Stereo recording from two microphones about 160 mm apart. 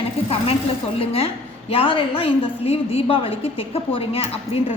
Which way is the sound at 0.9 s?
35° left (ahead or behind).